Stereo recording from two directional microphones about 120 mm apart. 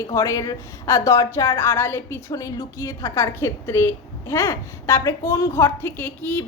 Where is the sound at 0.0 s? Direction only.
25° left (ahead or behind).